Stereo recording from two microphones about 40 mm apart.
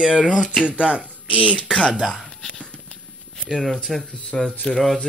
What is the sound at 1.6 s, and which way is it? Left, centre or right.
Speech, centre.